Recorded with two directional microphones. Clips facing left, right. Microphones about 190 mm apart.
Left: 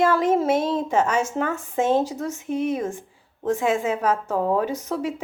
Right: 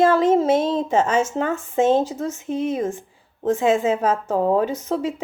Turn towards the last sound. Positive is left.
turn(degrees=-25)  # may be behind; listen again after turning